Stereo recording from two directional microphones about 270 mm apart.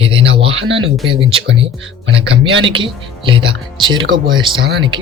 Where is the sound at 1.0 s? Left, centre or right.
Centre.